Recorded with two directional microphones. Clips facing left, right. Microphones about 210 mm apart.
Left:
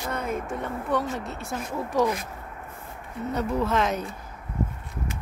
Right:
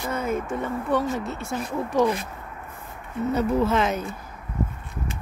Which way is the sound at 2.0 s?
30° right (ahead or behind).